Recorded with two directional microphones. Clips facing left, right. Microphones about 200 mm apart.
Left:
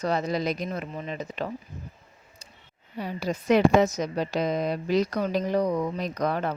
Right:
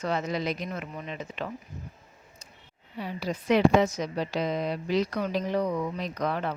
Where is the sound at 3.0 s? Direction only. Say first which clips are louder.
Left 2 dB; 45° left (ahead or behind).